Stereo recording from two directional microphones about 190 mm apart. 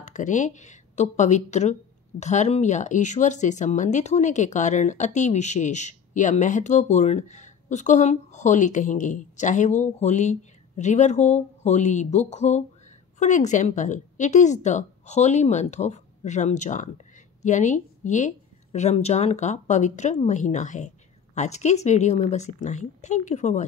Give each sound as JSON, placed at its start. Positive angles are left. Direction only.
{"t": 0.0, "sound": "speech", "side_deg": 40}